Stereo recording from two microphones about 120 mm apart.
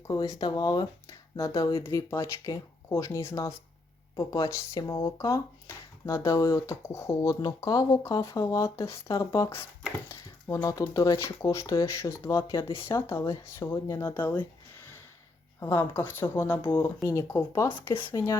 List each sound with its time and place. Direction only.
0.1 s speech: 35° left (ahead or behind); by 14.3 s 15° left (ahead or behind)
15.6 s speech: 20° left (ahead or behind)